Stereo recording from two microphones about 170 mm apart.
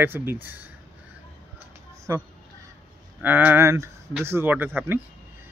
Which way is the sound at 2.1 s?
15° right (ahead or behind).